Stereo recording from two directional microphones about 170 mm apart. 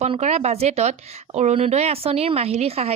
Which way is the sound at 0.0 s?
40° right (ahead or behind).